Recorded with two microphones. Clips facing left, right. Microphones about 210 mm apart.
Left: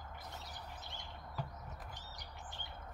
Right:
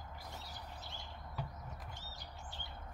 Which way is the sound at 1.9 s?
15° left (ahead or behind).